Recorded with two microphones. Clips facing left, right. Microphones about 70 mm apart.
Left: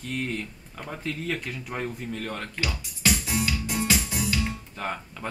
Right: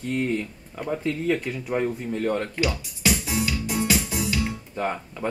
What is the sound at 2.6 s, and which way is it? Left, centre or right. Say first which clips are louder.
Music: right 4 dB; centre.